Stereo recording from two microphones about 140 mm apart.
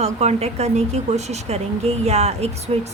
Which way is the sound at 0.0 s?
50° right (ahead or behind).